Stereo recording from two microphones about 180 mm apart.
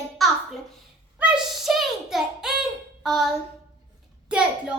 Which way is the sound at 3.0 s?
Centre (ahead or behind).